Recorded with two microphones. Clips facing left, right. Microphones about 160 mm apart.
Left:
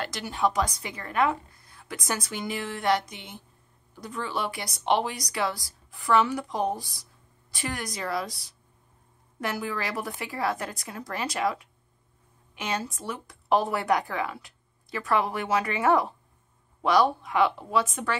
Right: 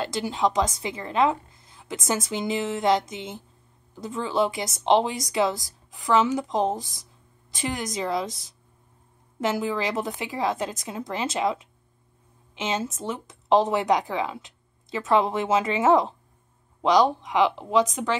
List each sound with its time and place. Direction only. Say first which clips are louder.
0.0 s speech: right 3 dB; 25° right (ahead or behind)
9.4 s speech: right 5 dB; 20° right (ahead or behind)